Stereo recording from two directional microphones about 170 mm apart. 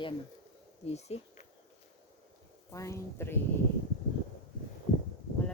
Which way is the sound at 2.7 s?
20° left (ahead or behind).